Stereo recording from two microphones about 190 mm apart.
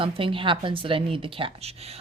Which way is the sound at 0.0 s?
25° right (ahead or behind).